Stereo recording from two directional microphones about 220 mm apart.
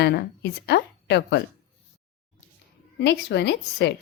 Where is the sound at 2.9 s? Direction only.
50° left (ahead or behind).